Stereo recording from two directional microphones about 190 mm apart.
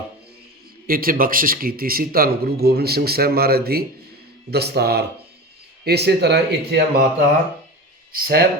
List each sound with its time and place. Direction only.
0.9 s speech: 50° right (ahead or behind)
8.1 s speech: 55° right (ahead or behind)